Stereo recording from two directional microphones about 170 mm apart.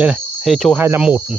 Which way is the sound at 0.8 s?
10° right (ahead or behind).